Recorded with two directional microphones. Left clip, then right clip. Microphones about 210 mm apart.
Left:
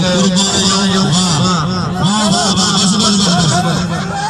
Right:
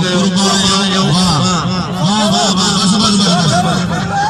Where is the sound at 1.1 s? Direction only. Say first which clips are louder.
Right 1 dB; 35° left (ahead or behind).